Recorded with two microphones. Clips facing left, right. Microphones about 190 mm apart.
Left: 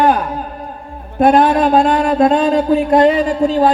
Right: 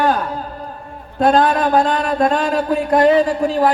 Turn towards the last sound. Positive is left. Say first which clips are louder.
# left 2 dB
turn(degrees=20)  # may be behind; listen again after turning